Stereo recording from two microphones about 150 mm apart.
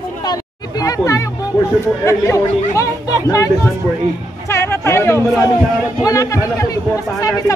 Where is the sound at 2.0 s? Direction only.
20° left (ahead or behind).